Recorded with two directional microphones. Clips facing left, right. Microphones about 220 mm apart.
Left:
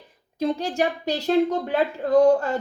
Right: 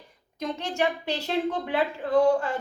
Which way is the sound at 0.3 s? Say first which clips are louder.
Left 5 dB; 35° left (ahead or behind).